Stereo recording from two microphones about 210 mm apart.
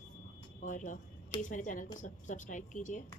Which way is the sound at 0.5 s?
35° left (ahead or behind).